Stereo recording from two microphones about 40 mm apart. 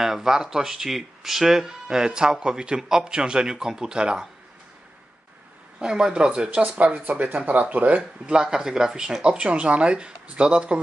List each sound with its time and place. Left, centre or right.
0.0 s speech: centre
5.8 s speech: centre
6.7 s speech: right
8.0 s speech: centre